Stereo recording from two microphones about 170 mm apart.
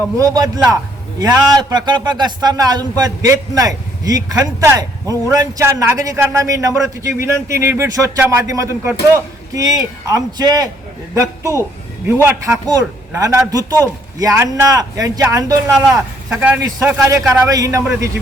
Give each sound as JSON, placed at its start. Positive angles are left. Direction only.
{"t": 0.2, "sound": "a man's voice", "side_deg": -20}
{"t": 16.3, "sound": "a man's voice", "side_deg": -5}
{"t": 16.6, "sound": "a man's voice", "side_deg": -20}